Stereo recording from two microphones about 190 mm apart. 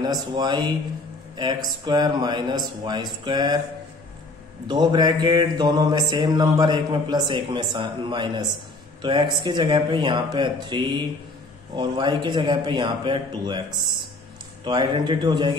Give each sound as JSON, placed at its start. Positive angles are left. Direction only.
{"t": 0.0, "sound": "mantra", "side_deg": -20}
{"t": 4.6, "sound": "mantra", "side_deg": -20}